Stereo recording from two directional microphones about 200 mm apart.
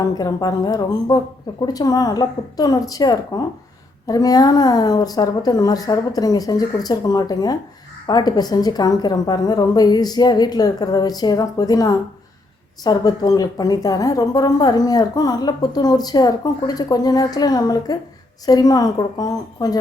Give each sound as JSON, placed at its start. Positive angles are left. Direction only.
{"t": 0.2, "sound": "a woman's voice", "side_deg": 20}